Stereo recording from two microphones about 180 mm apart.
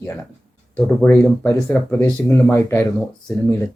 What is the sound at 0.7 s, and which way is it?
Speech, 10° left (ahead or behind).